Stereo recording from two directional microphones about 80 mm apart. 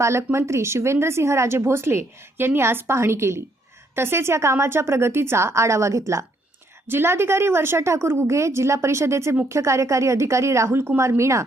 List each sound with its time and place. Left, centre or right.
0.0 s a woman's voice: right